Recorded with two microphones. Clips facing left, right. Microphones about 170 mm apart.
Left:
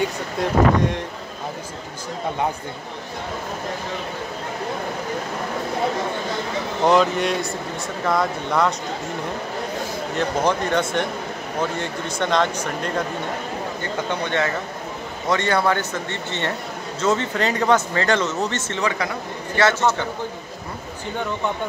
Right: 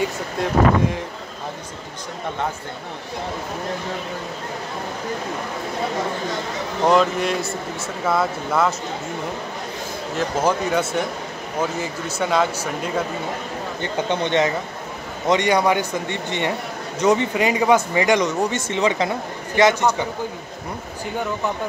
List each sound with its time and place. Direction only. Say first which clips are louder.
0.0 s speech: even; centre (ahead or behind)
6.8 s speech: even; centre (ahead or behind)
10.1 s speech: right 1 dB; 5° right (ahead or behind)
14.2 s speech: right 4 dB; 20° right (ahead or behind)